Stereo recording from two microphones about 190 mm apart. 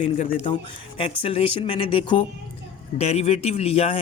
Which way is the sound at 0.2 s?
35° left (ahead or behind).